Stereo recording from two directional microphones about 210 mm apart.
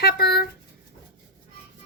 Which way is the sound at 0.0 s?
50° left (ahead or behind).